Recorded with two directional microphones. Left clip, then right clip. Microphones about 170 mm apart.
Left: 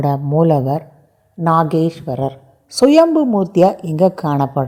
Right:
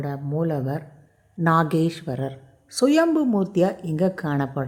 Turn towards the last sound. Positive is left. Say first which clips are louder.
# left 9 dB
turn(degrees=20)  # may be behind; listen again after turning